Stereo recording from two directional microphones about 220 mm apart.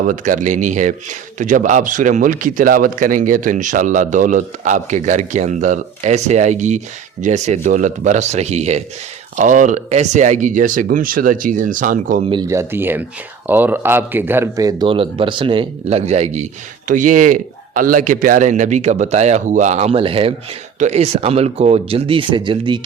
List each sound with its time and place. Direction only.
0.1 s speech: 35° right (ahead or behind)
12.2 s speech: 20° right (ahead or behind)